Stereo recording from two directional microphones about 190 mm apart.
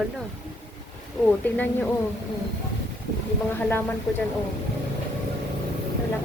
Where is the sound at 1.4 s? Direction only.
10° left (ahead or behind).